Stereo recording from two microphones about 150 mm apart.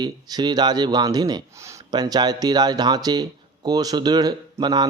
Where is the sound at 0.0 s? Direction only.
30° right (ahead or behind).